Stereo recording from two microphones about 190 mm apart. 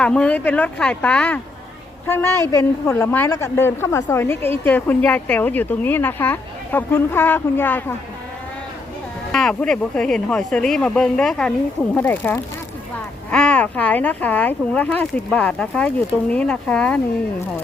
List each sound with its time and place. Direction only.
0.0 s a woman's voice: 5° left (ahead or behind)
9.3 s a woman's voice: 5° left (ahead or behind)